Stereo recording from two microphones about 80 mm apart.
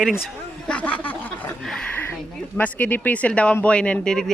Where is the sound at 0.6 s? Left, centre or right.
Centre.